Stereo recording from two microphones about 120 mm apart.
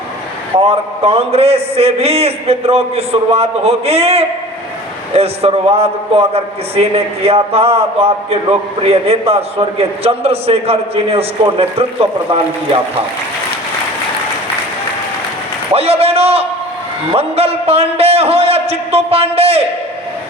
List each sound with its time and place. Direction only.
0.5 s a man's voice: 55° right (ahead or behind)
15.7 s a man's voice: 55° right (ahead or behind)